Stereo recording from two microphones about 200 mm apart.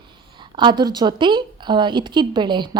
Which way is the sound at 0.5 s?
20° right (ahead or behind).